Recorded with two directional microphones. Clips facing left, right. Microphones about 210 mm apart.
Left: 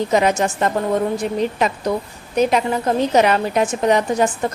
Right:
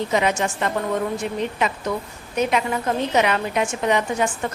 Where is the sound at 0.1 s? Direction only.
40° left (ahead or behind).